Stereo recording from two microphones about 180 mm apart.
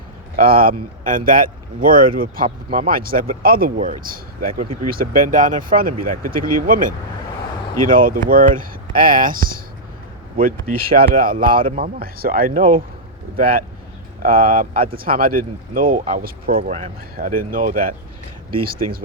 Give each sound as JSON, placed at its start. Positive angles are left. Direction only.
{"t": 0.3, "sound": "speech", "side_deg": -55}